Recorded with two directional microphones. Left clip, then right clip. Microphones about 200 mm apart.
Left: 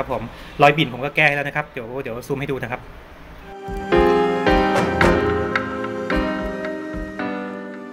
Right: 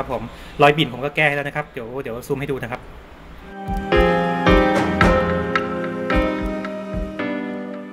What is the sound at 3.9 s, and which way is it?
Music, 15° left (ahead or behind).